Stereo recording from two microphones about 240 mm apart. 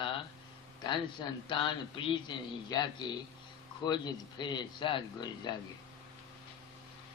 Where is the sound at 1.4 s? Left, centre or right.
Left.